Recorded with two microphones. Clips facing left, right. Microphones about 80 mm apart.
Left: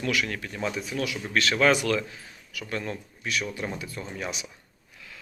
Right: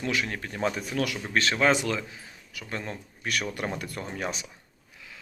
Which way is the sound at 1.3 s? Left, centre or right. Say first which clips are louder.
Left 2 dB; right.